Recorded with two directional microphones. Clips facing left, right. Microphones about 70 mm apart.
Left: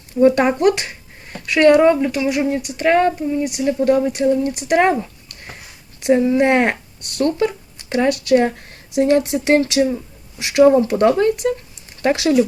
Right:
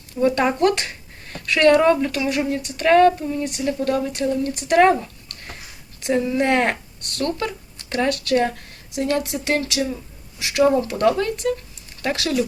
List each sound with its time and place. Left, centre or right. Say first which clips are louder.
0.2 s speech: left 4 dB; left
7.0 s speech: left 7 dB; centre
8.7 s speech: left 7 dB; left